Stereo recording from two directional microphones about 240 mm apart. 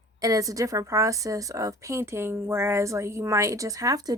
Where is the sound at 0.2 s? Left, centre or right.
Centre.